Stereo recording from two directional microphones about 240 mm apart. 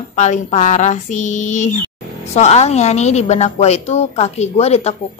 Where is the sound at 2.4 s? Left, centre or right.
Left.